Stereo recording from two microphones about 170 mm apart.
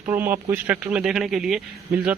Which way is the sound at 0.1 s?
10° right (ahead or behind).